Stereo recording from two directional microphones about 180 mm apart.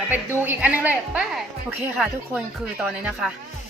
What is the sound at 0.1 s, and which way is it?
A woman's voice, 10° right (ahead or behind).